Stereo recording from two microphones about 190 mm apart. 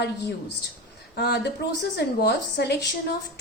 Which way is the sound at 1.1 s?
60° left (ahead or behind).